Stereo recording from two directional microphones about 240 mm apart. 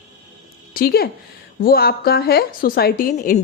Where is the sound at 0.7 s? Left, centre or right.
Left.